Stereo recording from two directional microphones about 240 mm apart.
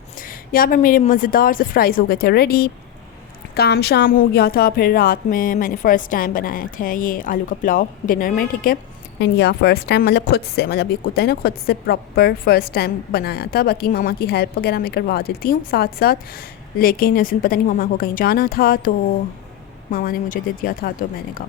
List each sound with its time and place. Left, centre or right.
0.2 s a woman's voice: left